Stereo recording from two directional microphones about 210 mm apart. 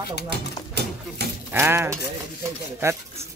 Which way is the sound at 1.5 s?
10° right (ahead or behind).